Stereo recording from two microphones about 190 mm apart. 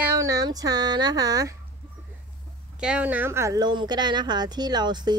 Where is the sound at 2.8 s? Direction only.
5° right (ahead or behind).